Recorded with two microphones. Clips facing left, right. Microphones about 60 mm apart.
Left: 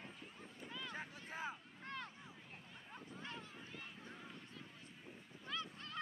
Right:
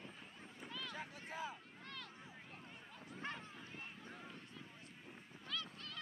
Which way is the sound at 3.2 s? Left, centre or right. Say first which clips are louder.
Right 6 dB; right.